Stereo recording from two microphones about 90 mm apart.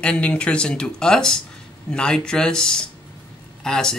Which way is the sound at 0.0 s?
15° left (ahead or behind).